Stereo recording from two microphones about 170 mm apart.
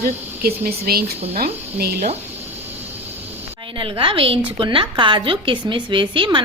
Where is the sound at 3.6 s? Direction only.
30° right (ahead or behind).